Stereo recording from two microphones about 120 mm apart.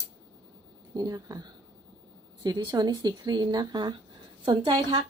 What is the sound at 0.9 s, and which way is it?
Speech, 30° right (ahead or behind).